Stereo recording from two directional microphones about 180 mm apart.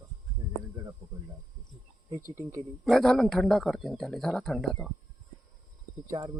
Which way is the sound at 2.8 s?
Centre (ahead or behind).